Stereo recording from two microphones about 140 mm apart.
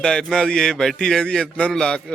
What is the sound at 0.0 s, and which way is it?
Speech, 5° left (ahead or behind).